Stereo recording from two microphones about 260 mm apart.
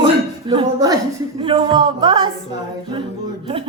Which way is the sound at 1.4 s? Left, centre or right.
Centre.